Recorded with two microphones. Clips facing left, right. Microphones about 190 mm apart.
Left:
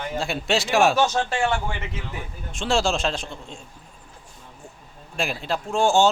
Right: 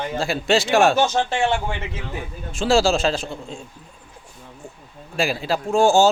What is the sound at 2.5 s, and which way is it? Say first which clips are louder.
Speech: right 5 dB; 5° right (ahead or behind).